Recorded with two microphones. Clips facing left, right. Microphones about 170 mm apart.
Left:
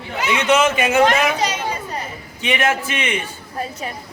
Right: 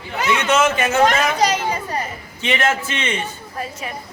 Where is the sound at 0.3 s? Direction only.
15° left (ahead or behind).